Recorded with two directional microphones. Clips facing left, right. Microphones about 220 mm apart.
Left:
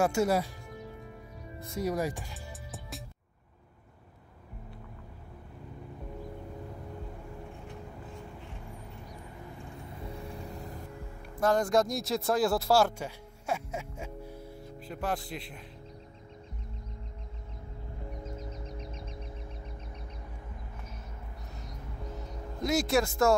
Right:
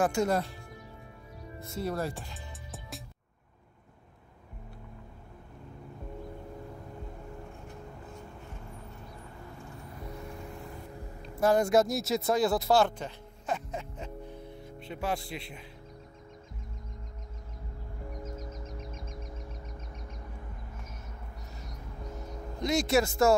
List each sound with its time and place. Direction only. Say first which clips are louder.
0.0 s speech: left 1 dB; 10° left (ahead or behind)
1.8 s speech: left 2 dB; 15° left (ahead or behind)
11.4 s speech: right 2 dB; 10° right (ahead or behind)
18.5 s a sound: even; 50° right (ahead or behind)
22.6 s speech: right 1 dB; 5° left (ahead or behind)